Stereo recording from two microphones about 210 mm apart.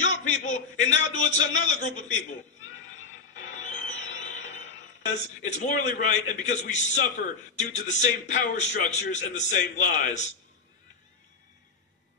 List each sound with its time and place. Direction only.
0.1 s a sound: 35° left (ahead or behind)
3.3 s music: 35° left (ahead or behind)
5.5 s a man's voice: 35° left (ahead or behind)